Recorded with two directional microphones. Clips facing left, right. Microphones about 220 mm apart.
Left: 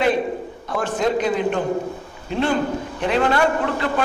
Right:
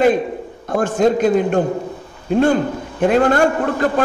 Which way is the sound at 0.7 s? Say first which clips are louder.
Right 6 dB; 50° right (ahead or behind).